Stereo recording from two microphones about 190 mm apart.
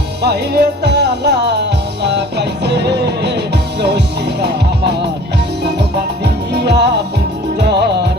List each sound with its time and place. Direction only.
0.2 s music: 60° right (ahead or behind)
2.6 s music: 60° right (ahead or behind)
4.4 s music: 60° right (ahead or behind)
6.2 s music: 60° right (ahead or behind)